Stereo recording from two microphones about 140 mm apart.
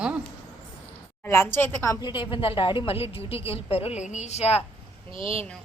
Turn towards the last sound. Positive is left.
turn(degrees=-40)  # may be behind; listen again after turning